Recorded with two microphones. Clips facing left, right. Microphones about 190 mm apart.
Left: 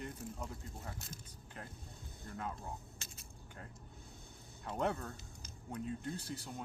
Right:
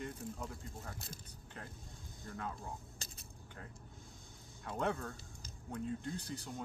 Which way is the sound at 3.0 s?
35° right (ahead or behind).